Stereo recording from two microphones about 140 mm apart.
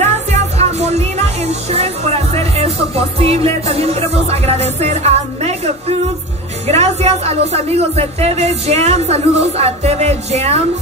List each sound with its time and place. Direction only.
0.0 s music: 50° right (ahead or behind)
6.7 s speech: 50° right (ahead or behind)